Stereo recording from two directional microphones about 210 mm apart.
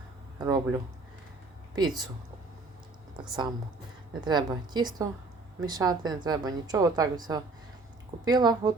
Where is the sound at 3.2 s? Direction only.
20° right (ahead or behind).